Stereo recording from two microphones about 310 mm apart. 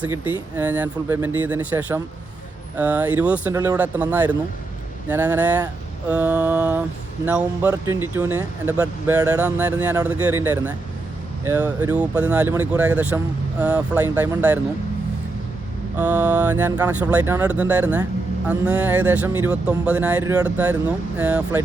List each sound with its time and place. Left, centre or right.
0.6 s speech: centre
10.2 s speech: right
10.4 s speech: centre
16.0 s speech: centre